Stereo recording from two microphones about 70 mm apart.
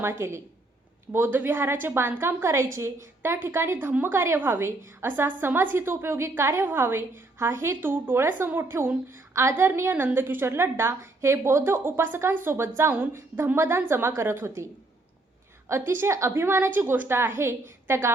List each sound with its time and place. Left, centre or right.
0.0 s a woman's voice: right
15.9 s a woman's voice: right